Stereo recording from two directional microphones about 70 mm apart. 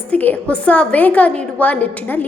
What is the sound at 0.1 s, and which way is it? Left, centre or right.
A woman's voice, left.